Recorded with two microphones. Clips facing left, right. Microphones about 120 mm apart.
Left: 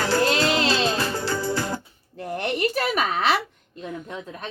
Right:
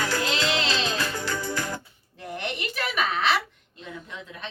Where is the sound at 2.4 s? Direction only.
40° left (ahead or behind).